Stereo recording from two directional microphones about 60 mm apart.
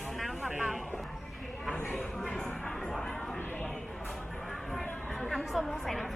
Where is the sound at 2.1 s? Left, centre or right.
Centre.